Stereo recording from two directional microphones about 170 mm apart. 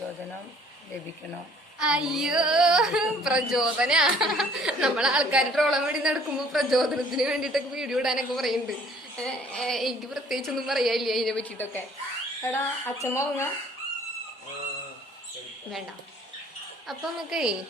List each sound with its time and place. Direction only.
1.8 s speech: 5° right (ahead or behind); by 13.5 s 15° left (ahead or behind)
16.8 s speech: centre (ahead or behind)